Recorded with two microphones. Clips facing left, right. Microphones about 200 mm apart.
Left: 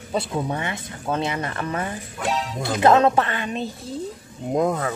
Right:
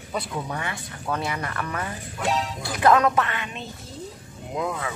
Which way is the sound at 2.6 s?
25° left (ahead or behind).